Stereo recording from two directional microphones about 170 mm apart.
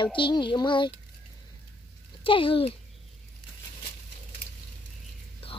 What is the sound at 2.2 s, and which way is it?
Speech, 30° left (ahead or behind).